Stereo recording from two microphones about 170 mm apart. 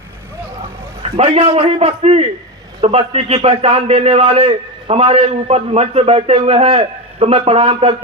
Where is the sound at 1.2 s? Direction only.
30° right (ahead or behind).